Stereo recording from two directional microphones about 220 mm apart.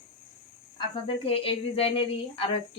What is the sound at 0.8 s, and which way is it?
Speech, 25° left (ahead or behind).